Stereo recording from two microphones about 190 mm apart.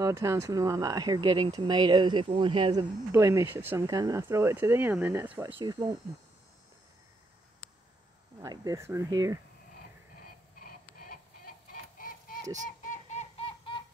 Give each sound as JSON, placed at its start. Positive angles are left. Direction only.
{"t": 0.0, "sound": "speech", "side_deg": -15}
{"t": 8.4, "sound": "speech", "side_deg": -20}
{"t": 10.6, "sound": "a sound", "side_deg": 50}
{"t": 12.8, "sound": "synthetic singing", "side_deg": 40}